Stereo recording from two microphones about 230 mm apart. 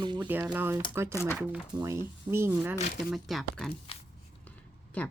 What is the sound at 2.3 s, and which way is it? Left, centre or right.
Speech, centre.